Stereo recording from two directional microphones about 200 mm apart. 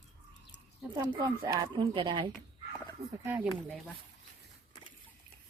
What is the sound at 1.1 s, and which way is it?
Speech, 20° right (ahead or behind).